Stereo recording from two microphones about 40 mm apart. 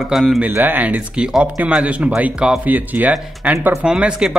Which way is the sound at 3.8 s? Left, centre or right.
Right.